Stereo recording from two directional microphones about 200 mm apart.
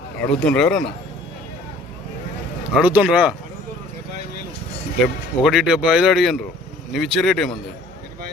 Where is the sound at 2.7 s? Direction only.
5° right (ahead or behind).